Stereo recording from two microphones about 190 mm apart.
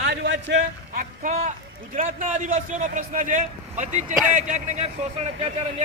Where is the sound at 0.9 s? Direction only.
45° right (ahead or behind).